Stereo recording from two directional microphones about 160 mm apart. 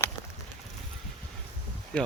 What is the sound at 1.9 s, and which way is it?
Speech, 5° left (ahead or behind).